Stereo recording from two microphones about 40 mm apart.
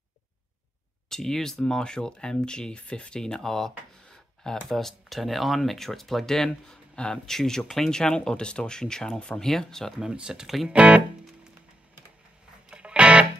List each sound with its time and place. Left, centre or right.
1.0 s speech: centre
3.2 s speech: centre
7.9 s speech: centre
10.1 s speech: centre
10.4 s speech: centre
10.7 s speech: right
12.6 s music: right